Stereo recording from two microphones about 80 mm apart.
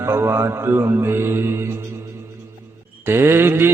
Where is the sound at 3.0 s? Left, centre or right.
Right.